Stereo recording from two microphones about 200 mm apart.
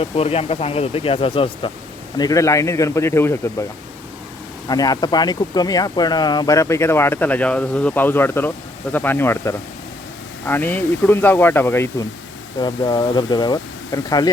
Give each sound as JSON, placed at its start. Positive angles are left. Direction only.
{"t": 0.0, "sound": "speech", "side_deg": 30}
{"t": 4.7, "sound": "speech", "side_deg": 20}